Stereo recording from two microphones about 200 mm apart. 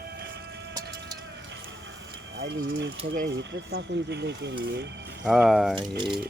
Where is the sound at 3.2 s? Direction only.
65° right (ahead or behind).